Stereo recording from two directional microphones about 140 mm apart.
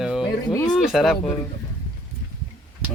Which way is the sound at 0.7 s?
Centre (ahead or behind).